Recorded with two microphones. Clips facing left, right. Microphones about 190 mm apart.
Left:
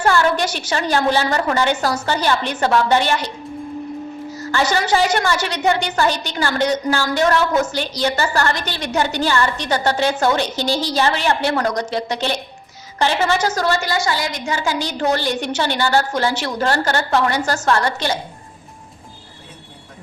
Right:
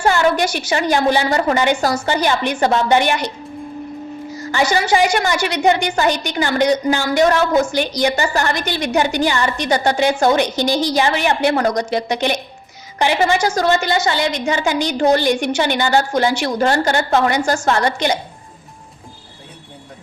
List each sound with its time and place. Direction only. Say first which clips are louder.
0.0 s a woman's voice: right 1 dB; 15° right (ahead or behind)
4.5 s a woman's voice: right 2 dB; 10° right (ahead or behind)